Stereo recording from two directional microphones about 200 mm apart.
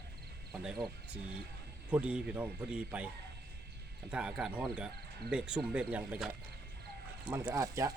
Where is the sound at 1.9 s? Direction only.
5° right (ahead or behind).